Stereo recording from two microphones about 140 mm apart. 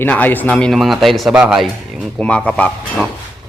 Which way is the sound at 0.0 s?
10° left (ahead or behind).